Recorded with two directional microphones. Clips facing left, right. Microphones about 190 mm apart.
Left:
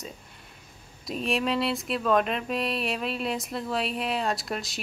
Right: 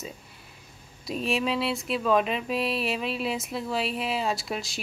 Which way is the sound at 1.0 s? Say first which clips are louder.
Even; centre (ahead or behind).